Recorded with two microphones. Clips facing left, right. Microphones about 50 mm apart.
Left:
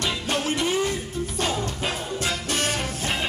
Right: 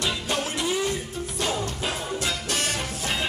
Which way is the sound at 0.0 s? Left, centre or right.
Left.